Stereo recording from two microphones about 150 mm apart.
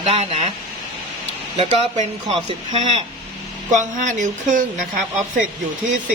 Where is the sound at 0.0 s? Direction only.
45° right (ahead or behind).